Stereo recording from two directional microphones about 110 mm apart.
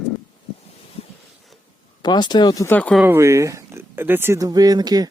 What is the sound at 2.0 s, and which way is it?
Speech, 40° left (ahead or behind).